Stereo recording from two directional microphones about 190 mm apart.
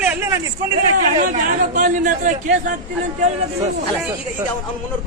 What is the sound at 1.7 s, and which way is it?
A man's voice, 45° right (ahead or behind).